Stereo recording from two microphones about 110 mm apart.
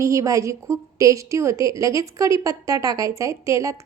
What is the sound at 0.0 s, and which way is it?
A woman's voice, 30° right (ahead or behind).